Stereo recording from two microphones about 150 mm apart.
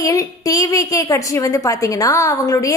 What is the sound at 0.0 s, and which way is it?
A woman's voice, 20° left (ahead or behind).